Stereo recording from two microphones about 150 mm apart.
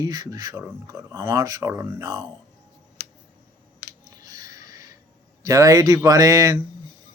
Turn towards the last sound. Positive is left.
turn(degrees=-25)  # may be behind; listen again after turning